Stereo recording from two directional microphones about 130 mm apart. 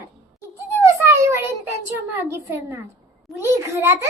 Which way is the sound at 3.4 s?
20° right (ahead or behind).